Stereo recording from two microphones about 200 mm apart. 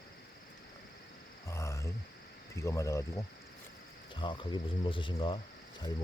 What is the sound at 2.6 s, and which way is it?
Speech, 15° left (ahead or behind).